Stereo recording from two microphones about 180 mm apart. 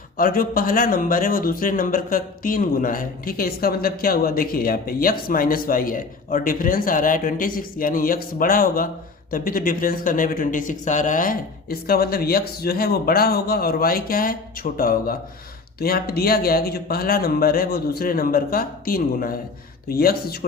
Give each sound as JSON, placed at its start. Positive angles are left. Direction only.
{"t": 0.2, "sound": "speech", "side_deg": 55}